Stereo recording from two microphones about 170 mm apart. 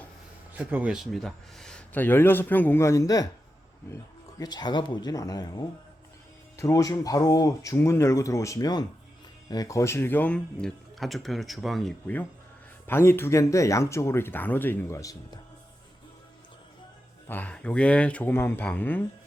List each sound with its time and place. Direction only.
0.6 s speech: 10° right (ahead or behind); by 15.1 s 15° left (ahead or behind)
17.2 s speech: 10° left (ahead or behind)